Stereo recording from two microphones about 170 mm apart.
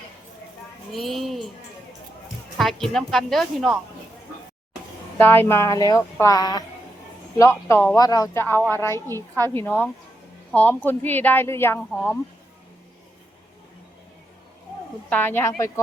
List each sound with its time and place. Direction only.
0.9 s music: centre (ahead or behind)
2.6 s speech: centre (ahead or behind)
5.1 s speech: 10° left (ahead or behind)
15.1 s speech: 10° left (ahead or behind)